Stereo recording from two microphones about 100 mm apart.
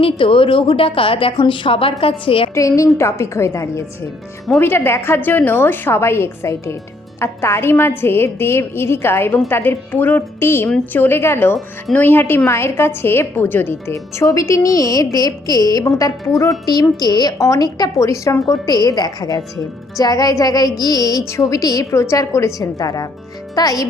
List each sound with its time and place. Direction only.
0.0 s a woman's voice: 60° left (ahead or behind)
2.6 s a woman's voice: 30° left (ahead or behind)